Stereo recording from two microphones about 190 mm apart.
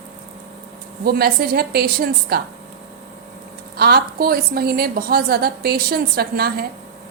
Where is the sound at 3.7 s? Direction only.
55° right (ahead or behind).